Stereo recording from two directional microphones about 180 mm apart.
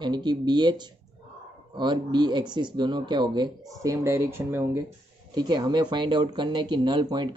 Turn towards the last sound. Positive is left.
turn(degrees=-25)  # may be behind; listen again after turning